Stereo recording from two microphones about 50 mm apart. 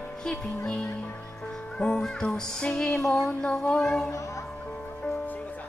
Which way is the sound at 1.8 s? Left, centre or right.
Centre.